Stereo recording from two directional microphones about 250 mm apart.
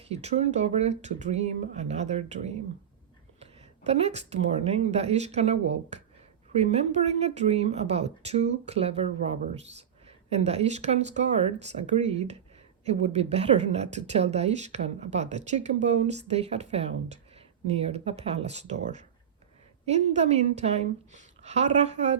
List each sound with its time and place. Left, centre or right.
0.1 s speech: right